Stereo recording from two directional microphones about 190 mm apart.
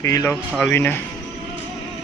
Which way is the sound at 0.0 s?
15° left (ahead or behind).